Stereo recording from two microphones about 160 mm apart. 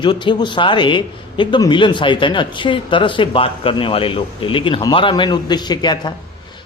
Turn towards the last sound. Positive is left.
turn(degrees=25)  # may be behind; listen again after turning